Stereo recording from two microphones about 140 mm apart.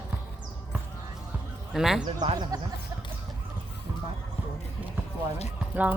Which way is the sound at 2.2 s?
30° right (ahead or behind).